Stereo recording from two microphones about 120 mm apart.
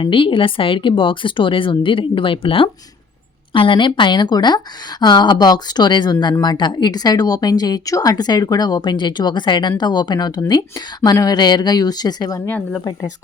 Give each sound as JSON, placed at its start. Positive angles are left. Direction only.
{"t": 0.0, "sound": "speech", "side_deg": 45}
{"t": 12.5, "sound": "speech", "side_deg": 15}